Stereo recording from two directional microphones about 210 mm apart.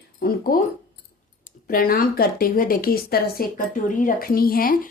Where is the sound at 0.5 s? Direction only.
45° left (ahead or behind).